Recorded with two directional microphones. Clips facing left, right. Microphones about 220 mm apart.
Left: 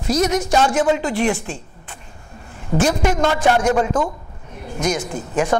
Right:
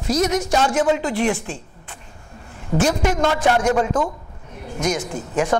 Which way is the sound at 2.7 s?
10° left (ahead or behind).